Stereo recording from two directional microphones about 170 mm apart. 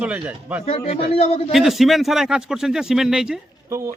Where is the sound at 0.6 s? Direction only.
35° left (ahead or behind).